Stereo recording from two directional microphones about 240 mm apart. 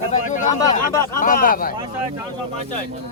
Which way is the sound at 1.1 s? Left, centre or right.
Left.